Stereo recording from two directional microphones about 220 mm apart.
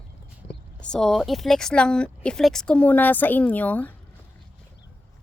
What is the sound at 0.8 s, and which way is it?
Speech, 5° left (ahead or behind).